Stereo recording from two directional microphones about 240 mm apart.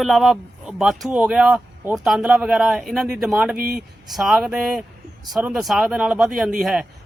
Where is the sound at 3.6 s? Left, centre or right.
Right.